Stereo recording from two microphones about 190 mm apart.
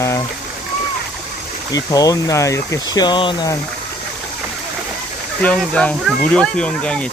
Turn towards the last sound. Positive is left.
turn(degrees=5)  # may be behind; listen again after turning